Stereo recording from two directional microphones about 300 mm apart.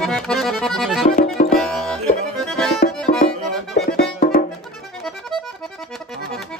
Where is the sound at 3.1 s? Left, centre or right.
Left.